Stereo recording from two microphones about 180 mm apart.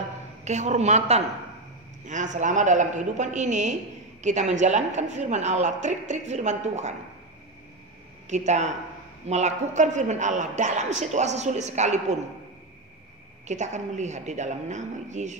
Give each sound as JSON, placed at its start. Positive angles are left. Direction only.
{"t": 0.5, "sound": "a woman's voice", "side_deg": -40}
{"t": 8.3, "sound": "speech", "side_deg": -40}
{"t": 13.5, "sound": "speech", "side_deg": -40}